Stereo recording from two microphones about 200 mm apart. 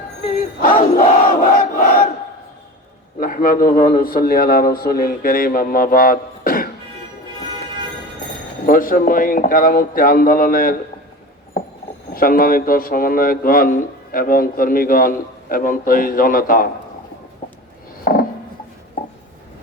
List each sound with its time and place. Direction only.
0.9 s crowd: 40° left (ahead or behind)
3.2 s a man's voice: 45° left (ahead or behind)
8.6 s a man's voice: 45° left (ahead or behind)
12.1 s a man's voice: 45° left (ahead or behind)
18.0 s a sound: 45° left (ahead or behind)